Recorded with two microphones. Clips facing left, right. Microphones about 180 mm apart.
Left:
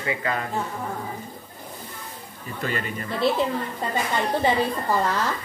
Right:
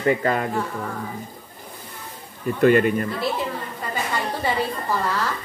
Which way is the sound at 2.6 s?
55° right (ahead or behind).